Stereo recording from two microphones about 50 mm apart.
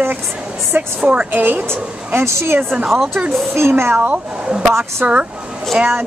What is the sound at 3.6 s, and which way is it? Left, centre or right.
Speech, right.